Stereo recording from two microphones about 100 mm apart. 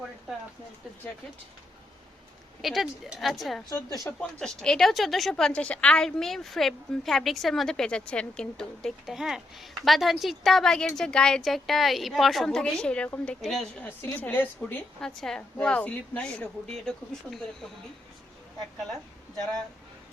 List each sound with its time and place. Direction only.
2.6 s a woman's voice: centre (ahead or behind)
3.7 s a woman's voice: 35° left (ahead or behind)
4.0 s a woman's voice: 5° left (ahead or behind)
13.8 s a woman's voice: 20° left (ahead or behind)
15.0 s a woman's voice: 5° left (ahead or behind)